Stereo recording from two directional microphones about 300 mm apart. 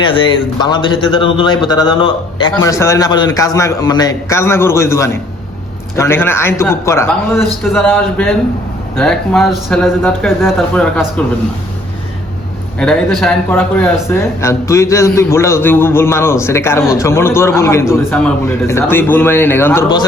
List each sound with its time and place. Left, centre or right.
0.0 s speech: centre
12.8 s speech: centre